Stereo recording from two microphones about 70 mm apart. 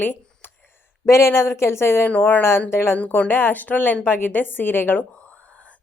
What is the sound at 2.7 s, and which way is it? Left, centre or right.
Speech, left.